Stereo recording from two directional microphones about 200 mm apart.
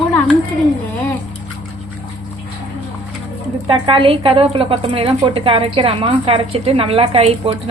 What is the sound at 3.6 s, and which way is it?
A woman's voice, 25° right (ahead or behind).